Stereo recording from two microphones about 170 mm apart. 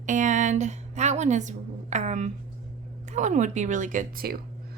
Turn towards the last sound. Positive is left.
turn(degrees=-60)  # may be behind; listen again after turning